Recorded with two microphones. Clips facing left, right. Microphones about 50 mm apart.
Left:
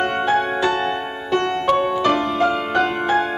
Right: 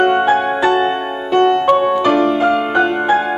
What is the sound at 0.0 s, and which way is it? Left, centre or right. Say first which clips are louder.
Music: right 6 dB; centre.